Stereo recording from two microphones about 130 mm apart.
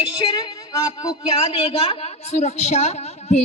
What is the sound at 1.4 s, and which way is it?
A woman's voice, 50° left (ahead or behind).